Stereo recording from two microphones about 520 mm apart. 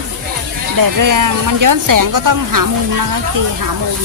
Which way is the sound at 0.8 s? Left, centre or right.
Right.